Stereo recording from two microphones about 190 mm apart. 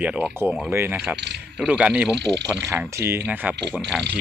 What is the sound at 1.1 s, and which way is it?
Speech, 65° right (ahead or behind).